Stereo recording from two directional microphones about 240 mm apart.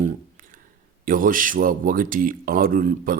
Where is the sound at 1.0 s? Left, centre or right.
Right.